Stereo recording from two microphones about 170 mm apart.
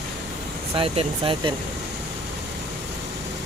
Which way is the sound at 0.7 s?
35° right (ahead or behind).